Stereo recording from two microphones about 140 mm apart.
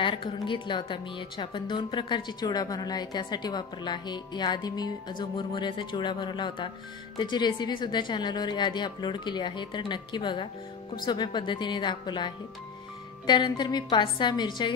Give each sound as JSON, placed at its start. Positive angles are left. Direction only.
{"t": 0.0, "sound": "a woman's voice", "side_deg": 35}
{"t": 13.3, "sound": "a woman's voice", "side_deg": 35}